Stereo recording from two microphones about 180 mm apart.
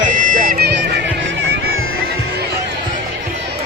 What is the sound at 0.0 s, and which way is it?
Music, 45° right (ahead or behind).